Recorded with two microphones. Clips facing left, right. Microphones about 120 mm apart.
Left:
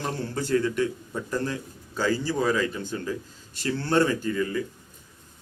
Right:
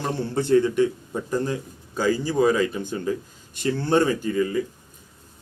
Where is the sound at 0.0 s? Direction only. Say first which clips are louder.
Right 4 dB; 25° right (ahead or behind).